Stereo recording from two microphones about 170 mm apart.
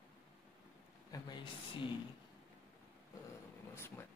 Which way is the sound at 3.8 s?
15° left (ahead or behind).